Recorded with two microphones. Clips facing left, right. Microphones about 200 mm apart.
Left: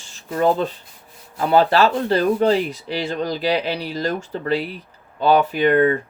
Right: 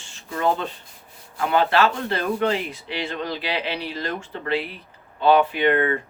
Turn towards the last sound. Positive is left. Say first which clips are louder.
# left 4 dB
turn(degrees=40)  # may be behind; listen again after turning